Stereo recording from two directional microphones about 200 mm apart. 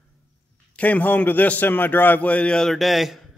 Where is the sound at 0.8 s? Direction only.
10° left (ahead or behind).